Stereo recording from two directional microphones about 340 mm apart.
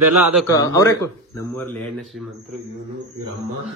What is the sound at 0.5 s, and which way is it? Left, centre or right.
Speech, centre.